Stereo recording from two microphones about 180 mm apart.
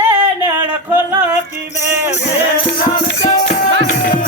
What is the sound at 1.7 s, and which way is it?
Music, 40° left (ahead or behind).